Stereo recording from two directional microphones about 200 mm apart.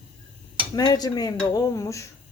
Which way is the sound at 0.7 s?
20° left (ahead or behind).